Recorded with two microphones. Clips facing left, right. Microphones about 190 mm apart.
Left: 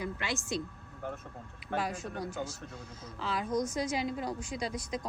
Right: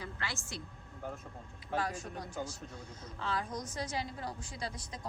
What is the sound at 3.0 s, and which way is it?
Speech, 10° left (ahead or behind).